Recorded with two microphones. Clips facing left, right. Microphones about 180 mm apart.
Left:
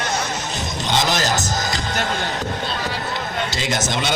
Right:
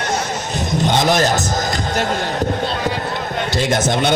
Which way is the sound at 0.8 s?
55° right (ahead or behind).